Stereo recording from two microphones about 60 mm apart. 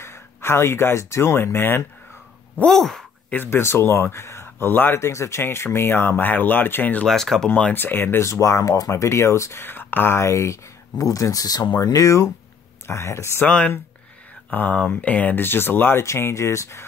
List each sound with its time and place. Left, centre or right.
0.0 s speech: left
2.6 s speech: centre
3.4 s speech: left
7.1 s speech: centre
7.4 s speech: centre
7.7 s speech: left
8.3 s speech: left
9.6 s speech: left
10.2 s speech: left
13.5 s speech: left
15.4 s speech: left
16.0 s speech: left